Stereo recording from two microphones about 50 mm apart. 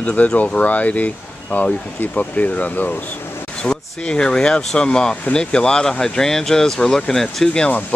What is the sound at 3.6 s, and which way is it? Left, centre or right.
Speech, centre.